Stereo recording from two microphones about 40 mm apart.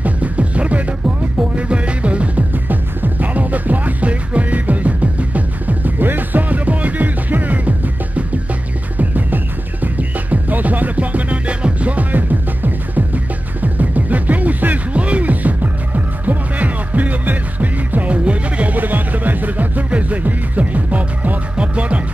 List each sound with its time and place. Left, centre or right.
0.0 s music: right
2.5 s music: right
18.8 s music: right